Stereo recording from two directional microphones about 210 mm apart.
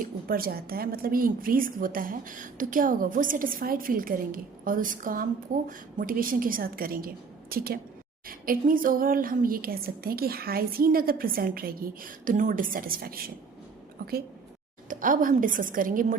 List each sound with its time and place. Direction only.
0.0 s a woman's voice: 45° right (ahead or behind)